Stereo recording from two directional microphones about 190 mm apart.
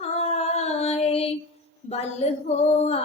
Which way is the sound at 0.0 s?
35° left (ahead or behind).